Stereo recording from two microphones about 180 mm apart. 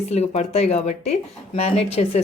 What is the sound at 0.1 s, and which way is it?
Speech, 40° left (ahead or behind).